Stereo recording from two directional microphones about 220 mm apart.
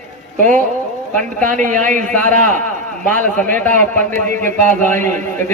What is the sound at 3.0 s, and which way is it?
A man's voice, 5° left (ahead or behind).